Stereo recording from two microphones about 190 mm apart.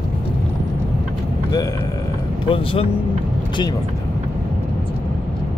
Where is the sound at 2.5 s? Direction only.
30° left (ahead or behind).